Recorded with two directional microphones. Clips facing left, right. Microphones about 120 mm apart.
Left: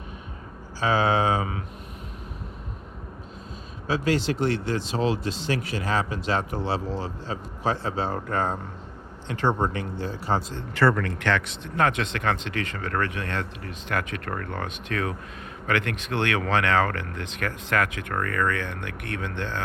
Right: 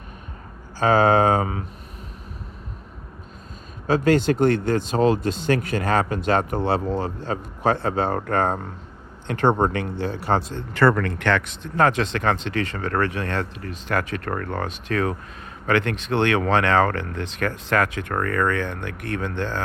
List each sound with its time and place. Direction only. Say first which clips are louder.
0.8 s speech: right 6 dB; 50° right (ahead or behind)
3.8 s speech: right 6 dB; 50° right (ahead or behind)